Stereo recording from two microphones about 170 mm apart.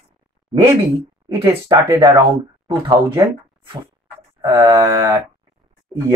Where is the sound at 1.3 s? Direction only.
15° right (ahead or behind).